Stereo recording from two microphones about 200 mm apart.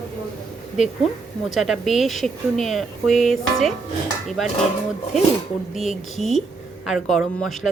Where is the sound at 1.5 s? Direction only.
Centre (ahead or behind).